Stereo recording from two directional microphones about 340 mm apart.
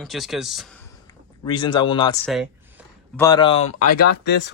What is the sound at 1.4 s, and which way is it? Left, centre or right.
Speech, centre.